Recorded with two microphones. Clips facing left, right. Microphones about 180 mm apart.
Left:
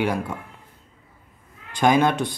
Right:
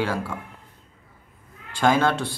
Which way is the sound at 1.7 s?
15° left (ahead or behind).